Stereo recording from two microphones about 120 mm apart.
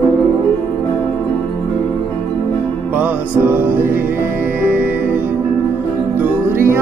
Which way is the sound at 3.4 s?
15° right (ahead or behind).